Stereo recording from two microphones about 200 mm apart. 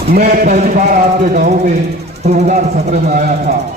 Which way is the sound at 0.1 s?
45° right (ahead or behind).